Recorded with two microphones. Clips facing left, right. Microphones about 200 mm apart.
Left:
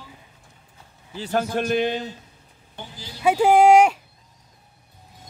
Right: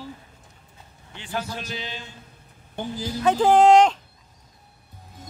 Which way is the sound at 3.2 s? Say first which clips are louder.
Left 1 dB; 10° left (ahead or behind).